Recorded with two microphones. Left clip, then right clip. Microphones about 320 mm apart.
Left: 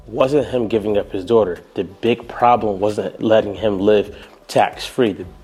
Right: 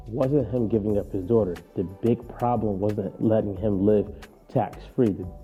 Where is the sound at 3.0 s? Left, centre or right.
Centre.